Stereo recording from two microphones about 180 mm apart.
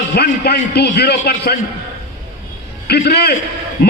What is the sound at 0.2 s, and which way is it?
A man's voice, 65° left (ahead or behind).